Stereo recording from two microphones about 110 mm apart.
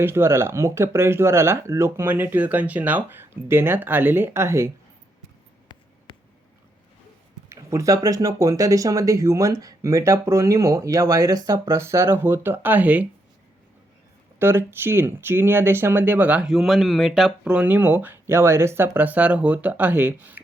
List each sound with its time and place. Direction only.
0.0 s speech: 20° right (ahead or behind)
6.1 s a sound: 50° left (ahead or behind)
7.5 s speech: 30° right (ahead or behind)
14.3 s speech: 20° right (ahead or behind); by 17.5 s 5° right (ahead or behind)
17.5 s speech: 15° right (ahead or behind)